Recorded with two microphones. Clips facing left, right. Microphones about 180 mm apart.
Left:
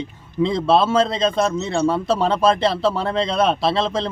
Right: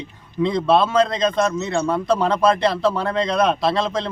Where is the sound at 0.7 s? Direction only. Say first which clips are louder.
Even; 5° left (ahead or behind).